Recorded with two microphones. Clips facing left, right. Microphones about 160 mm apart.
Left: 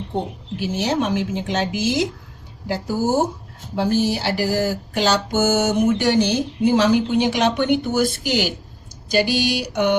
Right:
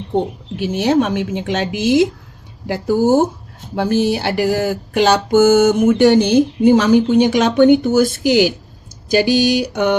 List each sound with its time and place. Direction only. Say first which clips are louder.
0.8 s speech: right 6 dB; 55° right (ahead or behind)